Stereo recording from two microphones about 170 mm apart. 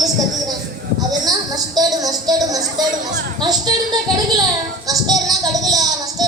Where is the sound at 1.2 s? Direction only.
20° right (ahead or behind).